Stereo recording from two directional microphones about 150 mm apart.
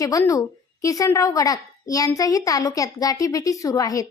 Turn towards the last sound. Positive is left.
turn(degrees=25)  # may be behind; listen again after turning